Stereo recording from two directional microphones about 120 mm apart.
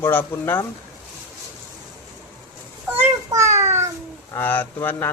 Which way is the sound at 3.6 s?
20° right (ahead or behind).